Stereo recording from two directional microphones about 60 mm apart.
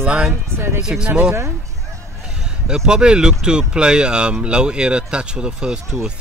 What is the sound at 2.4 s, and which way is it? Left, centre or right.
Speech, centre.